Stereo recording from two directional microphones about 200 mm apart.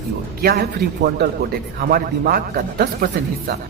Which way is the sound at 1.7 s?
45° right (ahead or behind).